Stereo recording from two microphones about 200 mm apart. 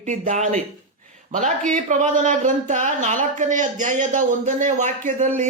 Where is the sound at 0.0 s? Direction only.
40° right (ahead or behind).